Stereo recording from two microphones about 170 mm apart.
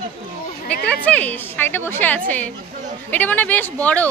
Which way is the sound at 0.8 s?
10° left (ahead or behind).